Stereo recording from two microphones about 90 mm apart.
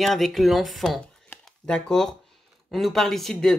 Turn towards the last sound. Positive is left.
turn(degrees=5)  # may be behind; listen again after turning